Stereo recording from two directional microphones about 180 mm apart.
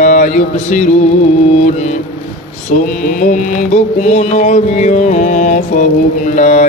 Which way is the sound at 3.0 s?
45° left (ahead or behind).